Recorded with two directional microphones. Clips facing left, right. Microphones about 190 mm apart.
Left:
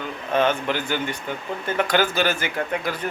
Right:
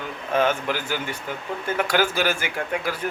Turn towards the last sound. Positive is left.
turn(degrees=-10)  # may be behind; listen again after turning